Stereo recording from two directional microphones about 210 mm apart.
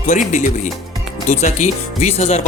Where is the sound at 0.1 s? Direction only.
35° left (ahead or behind).